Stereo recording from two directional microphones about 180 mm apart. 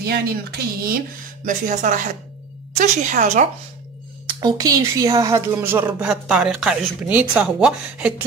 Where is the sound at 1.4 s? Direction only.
45° right (ahead or behind).